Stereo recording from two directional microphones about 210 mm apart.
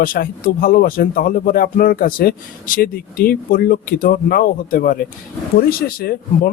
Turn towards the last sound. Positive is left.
turn(degrees=45)  # may be behind; listen again after turning